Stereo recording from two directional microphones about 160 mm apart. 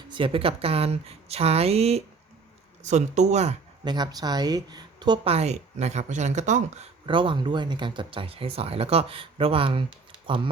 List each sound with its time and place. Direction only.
0.1 s speech: 35° right (ahead or behind)
3.8 s speech: 25° right (ahead or behind); by 6.8 s 45° right (ahead or behind)
7.0 s speech: 30° right (ahead or behind)